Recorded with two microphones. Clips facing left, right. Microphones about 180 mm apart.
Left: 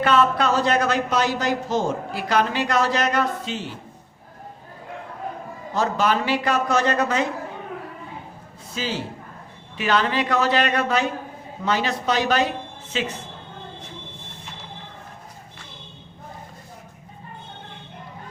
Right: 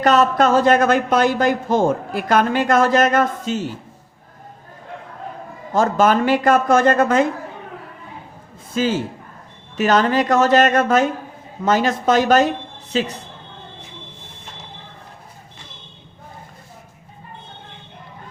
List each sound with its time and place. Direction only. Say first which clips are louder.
0.0 s speech: right 4 dB; 40° right (ahead or behind)
5.7 s speech: right 6 dB; 50° right (ahead or behind)
8.7 s a man's voice: right 8 dB; 50° right (ahead or behind)